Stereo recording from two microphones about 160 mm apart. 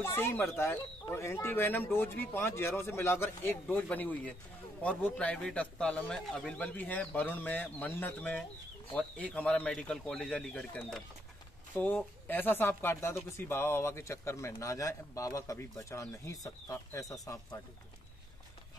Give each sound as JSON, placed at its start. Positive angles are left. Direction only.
{"t": 0.0, "sound": "speech", "side_deg": 15}